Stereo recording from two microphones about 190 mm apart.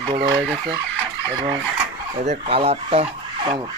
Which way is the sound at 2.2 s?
35° right (ahead or behind).